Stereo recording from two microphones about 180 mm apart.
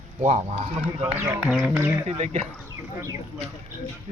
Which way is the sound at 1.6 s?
10° right (ahead or behind).